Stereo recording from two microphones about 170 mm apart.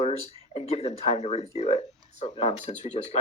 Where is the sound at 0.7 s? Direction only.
35° left (ahead or behind).